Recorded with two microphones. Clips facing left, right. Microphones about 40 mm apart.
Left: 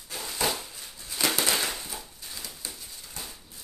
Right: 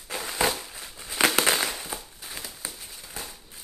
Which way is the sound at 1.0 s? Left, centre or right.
Right.